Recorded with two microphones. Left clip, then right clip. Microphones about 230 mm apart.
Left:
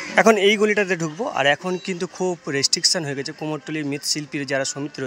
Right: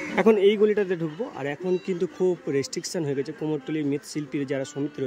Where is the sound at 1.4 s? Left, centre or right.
Centre.